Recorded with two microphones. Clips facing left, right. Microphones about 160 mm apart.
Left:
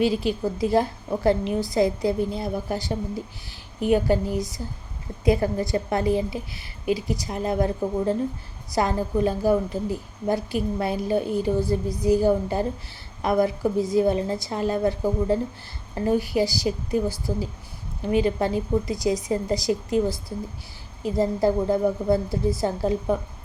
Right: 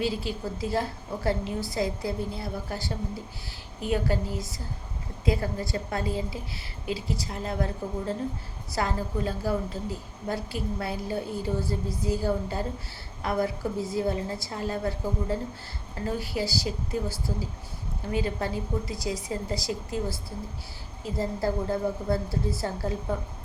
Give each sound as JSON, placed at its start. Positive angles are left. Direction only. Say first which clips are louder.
{"t": 0.0, "sound": "a woman's voice", "louder": "left 7 dB", "side_deg": 20}